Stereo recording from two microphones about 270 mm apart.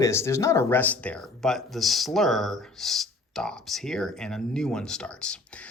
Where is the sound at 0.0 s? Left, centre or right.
Centre.